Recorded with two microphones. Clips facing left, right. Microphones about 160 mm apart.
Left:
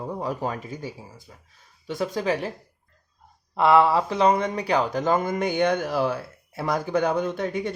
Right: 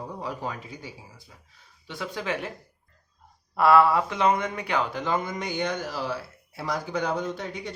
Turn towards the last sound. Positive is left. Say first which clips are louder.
# left 6 dB
turn(degrees=50)  # may be behind; listen again after turning